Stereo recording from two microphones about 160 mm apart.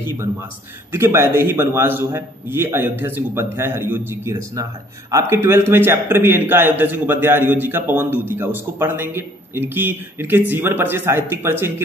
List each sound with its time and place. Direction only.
0.0 s a man's voice: 15° right (ahead or behind)